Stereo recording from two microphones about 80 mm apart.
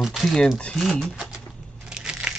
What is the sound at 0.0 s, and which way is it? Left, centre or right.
Speech, centre.